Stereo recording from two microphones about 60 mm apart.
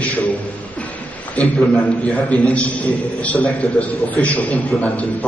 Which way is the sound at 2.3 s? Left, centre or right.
Left.